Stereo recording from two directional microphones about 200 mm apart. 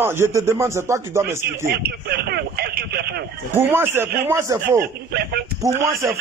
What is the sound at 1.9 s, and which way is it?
Telephone, 50° right (ahead or behind).